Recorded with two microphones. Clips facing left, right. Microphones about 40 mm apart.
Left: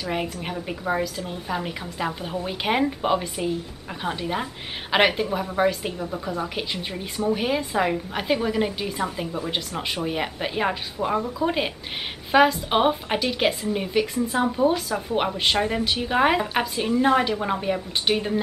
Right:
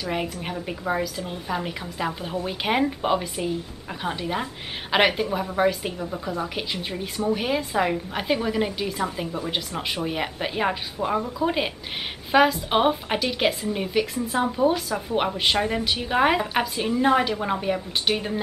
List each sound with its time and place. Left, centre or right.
0.0 s a woman's voice: centre